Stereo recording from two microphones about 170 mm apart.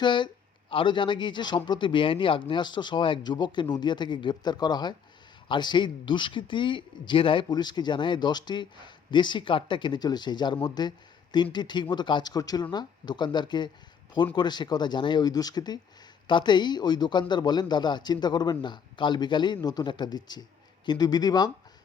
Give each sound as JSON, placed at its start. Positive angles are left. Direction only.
{"t": 0.0, "sound": "a man's voice", "side_deg": 25}